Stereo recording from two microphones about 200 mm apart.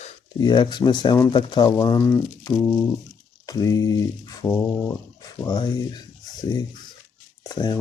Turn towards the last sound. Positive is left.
turn(degrees=20)  # may be behind; listen again after turning